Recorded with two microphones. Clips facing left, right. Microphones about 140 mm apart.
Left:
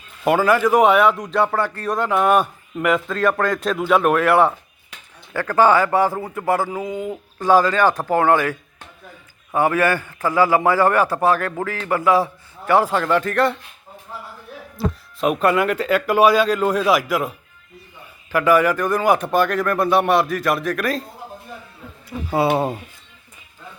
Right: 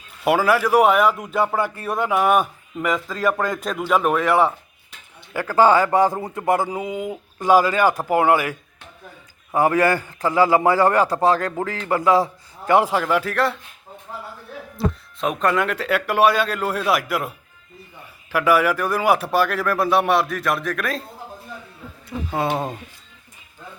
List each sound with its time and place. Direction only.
0.3 s speech: 5° right (ahead or behind)
5.3 s a man's voice: 15° right (ahead or behind)
9.6 s speech: 35° right (ahead or behind)
10.3 s a man's voice: 20° right (ahead or behind)
10.8 s a man's voice: 35° right (ahead or behind)
12.6 s a man's voice: 15° right (ahead or behind)
14.8 s speech: 5° left (ahead or behind)
22.3 s speech: 10° left (ahead or behind)